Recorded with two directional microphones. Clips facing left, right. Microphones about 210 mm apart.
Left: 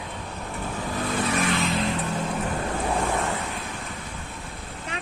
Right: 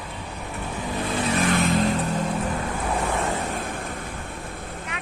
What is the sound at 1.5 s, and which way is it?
Vehicle, 50° right (ahead or behind).